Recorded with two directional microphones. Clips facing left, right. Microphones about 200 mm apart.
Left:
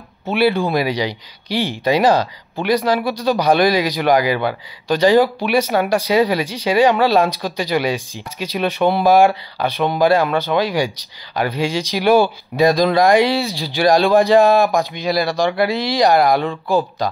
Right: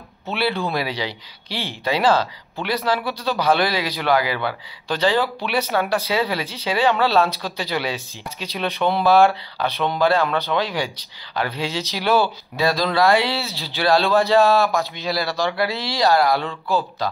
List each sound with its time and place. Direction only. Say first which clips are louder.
0.6 s speech: left 6 dB; 15° left (ahead or behind)